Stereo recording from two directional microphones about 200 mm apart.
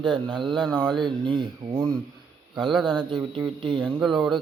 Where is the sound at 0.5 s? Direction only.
Centre (ahead or behind).